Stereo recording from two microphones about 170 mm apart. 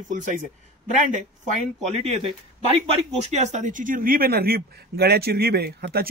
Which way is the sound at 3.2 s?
40° right (ahead or behind).